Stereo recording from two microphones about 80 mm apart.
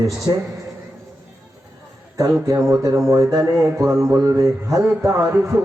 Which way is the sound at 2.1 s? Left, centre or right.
Right.